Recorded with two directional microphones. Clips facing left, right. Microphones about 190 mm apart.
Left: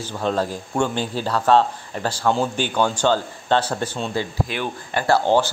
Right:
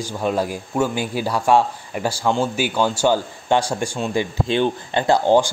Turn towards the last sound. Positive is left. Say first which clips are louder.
# right 2 dB
turn(degrees=-15)  # may be behind; listen again after turning